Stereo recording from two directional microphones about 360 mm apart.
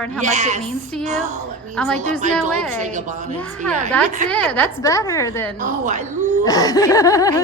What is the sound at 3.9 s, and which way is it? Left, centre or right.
A woman's voice, centre.